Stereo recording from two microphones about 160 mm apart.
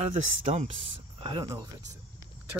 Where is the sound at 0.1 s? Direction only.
45° right (ahead or behind).